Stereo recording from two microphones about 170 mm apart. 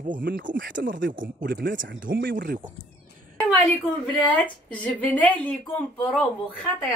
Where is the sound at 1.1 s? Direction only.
65° right (ahead or behind); by 2.3 s 90° right.